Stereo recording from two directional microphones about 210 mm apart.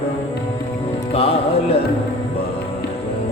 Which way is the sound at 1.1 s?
30° left (ahead or behind).